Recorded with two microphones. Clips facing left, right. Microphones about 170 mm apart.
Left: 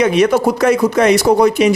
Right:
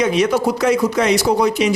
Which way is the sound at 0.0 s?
60° left (ahead or behind).